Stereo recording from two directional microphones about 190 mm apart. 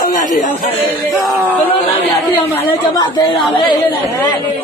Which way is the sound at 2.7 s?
20° left (ahead or behind).